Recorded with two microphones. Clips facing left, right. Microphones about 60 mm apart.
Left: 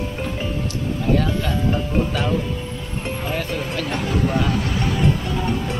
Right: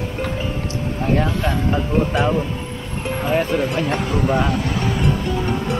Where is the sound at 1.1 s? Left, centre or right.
Centre.